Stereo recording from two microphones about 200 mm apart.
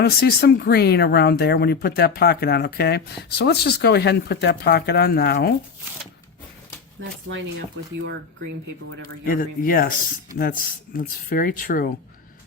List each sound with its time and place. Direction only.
0.0 s speech: 50° left (ahead or behind)
7.0 s speech: 70° right (ahead or behind)
9.2 s speech: 45° left (ahead or behind)